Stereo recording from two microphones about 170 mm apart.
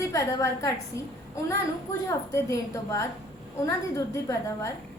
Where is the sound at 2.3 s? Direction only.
15° left (ahead or behind).